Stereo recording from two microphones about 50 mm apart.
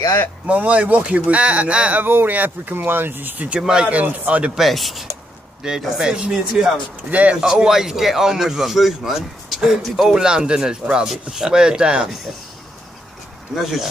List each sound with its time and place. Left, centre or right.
0.5 s speech: right
2.0 s speech: right
3.6 s a man's voice: centre
3.9 s speech: right
4.6 s a man's voice: centre
7.1 s speech: right
7.3 s a man's voice: centre
13.6 s speech: centre